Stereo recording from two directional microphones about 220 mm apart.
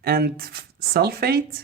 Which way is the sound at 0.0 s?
45° right (ahead or behind).